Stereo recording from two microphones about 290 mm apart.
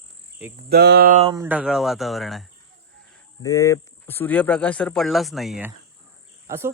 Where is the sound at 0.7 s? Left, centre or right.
Right.